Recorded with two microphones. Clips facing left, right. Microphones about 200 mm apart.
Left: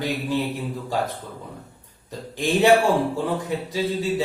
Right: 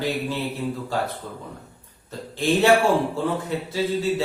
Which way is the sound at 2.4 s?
15° left (ahead or behind).